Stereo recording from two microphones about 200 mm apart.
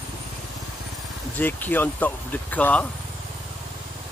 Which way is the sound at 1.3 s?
10° left (ahead or behind).